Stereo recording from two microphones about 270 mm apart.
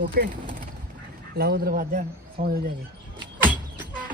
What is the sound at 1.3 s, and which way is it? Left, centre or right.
A man's voice, right.